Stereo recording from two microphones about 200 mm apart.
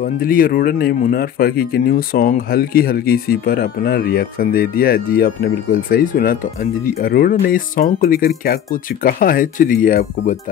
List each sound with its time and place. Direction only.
0.0 s speech: 45° left (ahead or behind)